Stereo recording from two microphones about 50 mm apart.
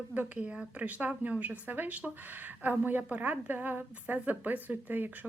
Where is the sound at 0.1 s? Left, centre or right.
Right.